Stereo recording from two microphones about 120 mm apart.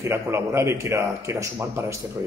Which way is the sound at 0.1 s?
20° right (ahead or behind).